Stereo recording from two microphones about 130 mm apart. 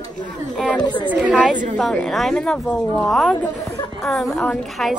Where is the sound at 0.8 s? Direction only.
35° left (ahead or behind).